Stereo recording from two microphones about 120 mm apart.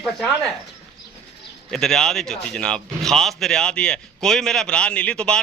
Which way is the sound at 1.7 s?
5° left (ahead or behind).